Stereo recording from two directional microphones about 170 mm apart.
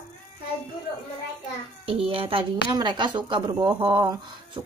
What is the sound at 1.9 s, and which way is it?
A woman's voice, 35° right (ahead or behind).